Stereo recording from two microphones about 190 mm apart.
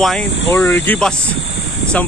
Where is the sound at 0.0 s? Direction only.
5° left (ahead or behind).